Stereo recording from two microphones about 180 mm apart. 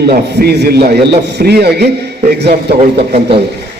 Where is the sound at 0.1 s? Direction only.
65° right (ahead or behind).